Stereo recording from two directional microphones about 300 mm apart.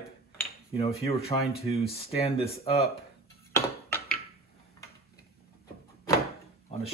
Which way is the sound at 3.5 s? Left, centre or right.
Centre.